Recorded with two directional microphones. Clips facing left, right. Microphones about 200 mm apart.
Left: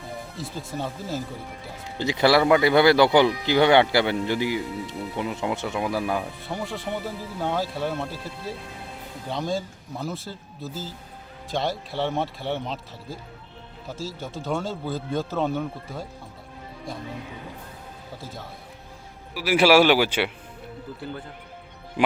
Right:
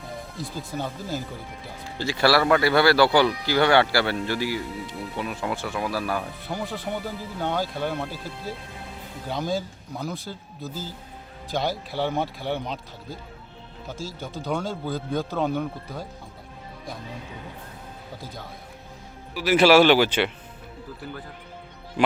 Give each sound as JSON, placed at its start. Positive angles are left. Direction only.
{"t": 0.3, "sound": "speech", "side_deg": 0}
{"t": 2.0, "sound": "speech", "side_deg": 20}
{"t": 6.4, "sound": "speech", "side_deg": 0}
{"t": 18.2, "sound": "speech", "side_deg": 0}